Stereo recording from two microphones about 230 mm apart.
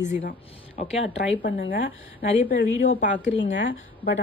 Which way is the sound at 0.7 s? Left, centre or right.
Left.